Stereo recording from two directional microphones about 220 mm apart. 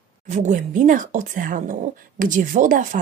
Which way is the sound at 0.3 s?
35° right (ahead or behind).